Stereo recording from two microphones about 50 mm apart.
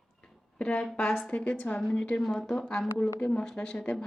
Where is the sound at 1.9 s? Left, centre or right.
Centre.